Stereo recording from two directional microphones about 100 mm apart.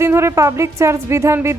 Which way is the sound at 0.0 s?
25° right (ahead or behind).